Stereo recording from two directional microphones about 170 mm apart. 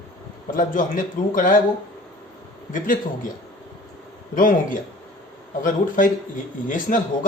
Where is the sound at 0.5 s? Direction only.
50° left (ahead or behind).